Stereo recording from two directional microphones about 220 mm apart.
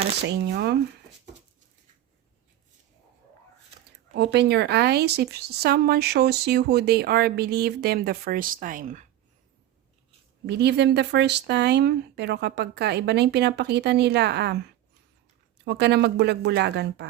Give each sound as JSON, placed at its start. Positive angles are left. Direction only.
{"t": 0.3, "sound": "a woman's voice", "side_deg": -50}
{"t": 4.1, "sound": "a woman's voice", "side_deg": -50}
{"t": 10.4, "sound": "a woman's voice", "side_deg": -50}
{"t": 15.6, "sound": "a woman's voice", "side_deg": -50}